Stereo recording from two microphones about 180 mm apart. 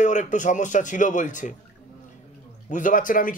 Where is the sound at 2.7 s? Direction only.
45° left (ahead or behind).